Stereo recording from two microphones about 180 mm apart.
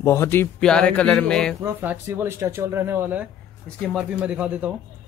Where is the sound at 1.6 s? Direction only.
10° right (ahead or behind).